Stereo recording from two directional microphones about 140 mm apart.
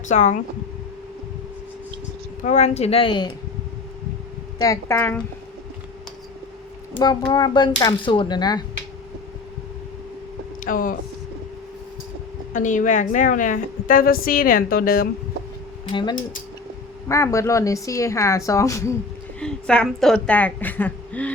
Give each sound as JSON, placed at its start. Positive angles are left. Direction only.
{"t": 0.1, "sound": "speech", "side_deg": 60}
{"t": 2.4, "sound": "a woman's voice", "side_deg": 55}
{"t": 4.5, "sound": "speech", "side_deg": 25}
{"t": 7.0, "sound": "speech", "side_deg": 30}
{"t": 10.6, "sound": "speech", "side_deg": 75}
{"t": 12.5, "sound": "a woman's voice", "side_deg": 65}
{"t": 15.9, "sound": "speech", "side_deg": 35}
{"t": 17.1, "sound": "speech", "side_deg": 20}
{"t": 19.4, "sound": "a woman's voice", "side_deg": 5}